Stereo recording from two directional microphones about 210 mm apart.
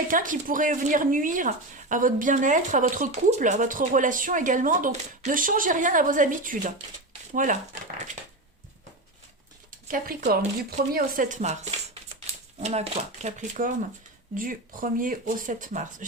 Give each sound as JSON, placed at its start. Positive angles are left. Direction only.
{"t": 0.1, "sound": "speech", "side_deg": -40}
{"t": 9.9, "sound": "speech", "side_deg": -40}